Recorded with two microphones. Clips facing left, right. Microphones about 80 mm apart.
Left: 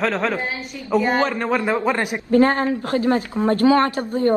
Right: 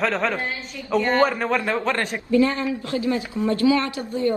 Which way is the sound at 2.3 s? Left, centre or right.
Left.